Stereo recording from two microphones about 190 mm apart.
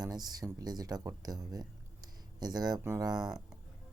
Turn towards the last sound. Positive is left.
turn(degrees=-5)  # may be behind; listen again after turning